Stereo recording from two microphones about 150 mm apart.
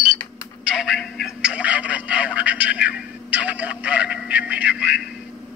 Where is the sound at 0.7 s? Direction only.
5° right (ahead or behind).